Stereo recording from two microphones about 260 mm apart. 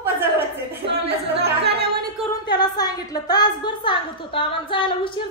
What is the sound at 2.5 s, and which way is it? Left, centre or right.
A woman's voice, centre.